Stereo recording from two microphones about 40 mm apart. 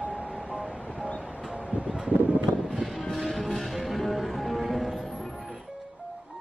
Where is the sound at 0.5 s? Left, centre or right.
Right.